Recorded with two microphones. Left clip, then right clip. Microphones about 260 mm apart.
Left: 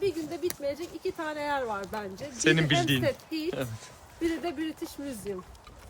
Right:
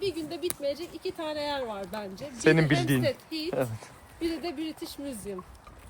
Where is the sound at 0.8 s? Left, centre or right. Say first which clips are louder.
Left 1 dB; centre.